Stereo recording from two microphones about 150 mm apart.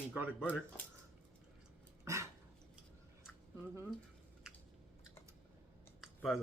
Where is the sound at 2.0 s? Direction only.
20° right (ahead or behind).